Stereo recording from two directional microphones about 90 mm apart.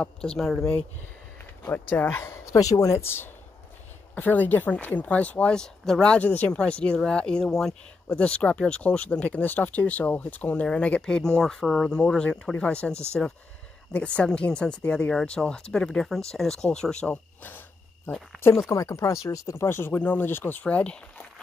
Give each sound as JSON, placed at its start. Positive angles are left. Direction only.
{"t": 0.0, "sound": "speech", "side_deg": 10}
{"t": 1.7, "sound": "speech", "side_deg": 25}
{"t": 2.5, "sound": "speech", "side_deg": 40}
{"t": 3.0, "sound": "speech", "side_deg": 25}
{"t": 17.4, "sound": "cricket", "side_deg": 20}
{"t": 18.7, "sound": "speech", "side_deg": 35}